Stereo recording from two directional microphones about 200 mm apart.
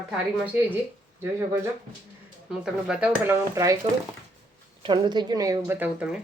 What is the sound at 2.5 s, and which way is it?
Speech, 5° right (ahead or behind).